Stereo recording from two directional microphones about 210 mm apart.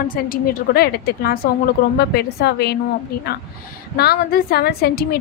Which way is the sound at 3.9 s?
50° left (ahead or behind).